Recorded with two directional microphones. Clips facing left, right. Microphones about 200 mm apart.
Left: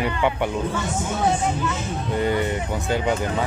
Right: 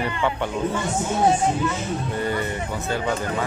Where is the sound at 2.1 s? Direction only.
20° left (ahead or behind).